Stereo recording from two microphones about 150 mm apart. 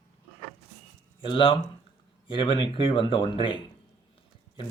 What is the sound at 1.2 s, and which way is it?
Speech, 35° left (ahead or behind).